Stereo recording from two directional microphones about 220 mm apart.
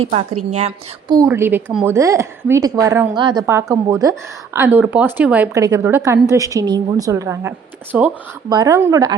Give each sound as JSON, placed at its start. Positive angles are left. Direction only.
{"t": 1.0, "sound": "a woman's voice", "side_deg": -15}
{"t": 8.4, "sound": "a woman's voice", "side_deg": -15}